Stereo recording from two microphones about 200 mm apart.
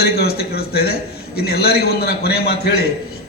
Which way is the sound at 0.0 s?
50° left (ahead or behind).